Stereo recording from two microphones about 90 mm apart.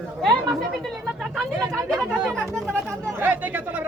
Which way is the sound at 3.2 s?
20° right (ahead or behind).